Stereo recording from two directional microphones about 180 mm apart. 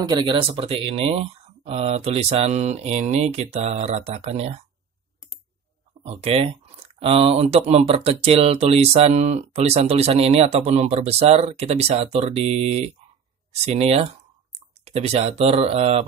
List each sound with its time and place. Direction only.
0.1 s speech: 25° right (ahead or behind)
6.0 s speech: 35° right (ahead or behind)